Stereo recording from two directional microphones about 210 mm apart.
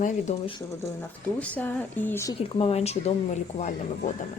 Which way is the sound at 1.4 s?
10° left (ahead or behind).